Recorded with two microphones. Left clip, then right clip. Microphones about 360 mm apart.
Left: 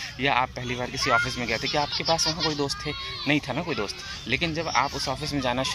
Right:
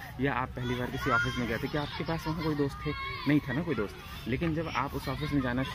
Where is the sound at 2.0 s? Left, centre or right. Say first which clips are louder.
Left 10 dB; left.